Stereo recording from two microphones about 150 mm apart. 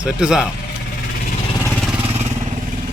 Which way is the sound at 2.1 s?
45° right (ahead or behind).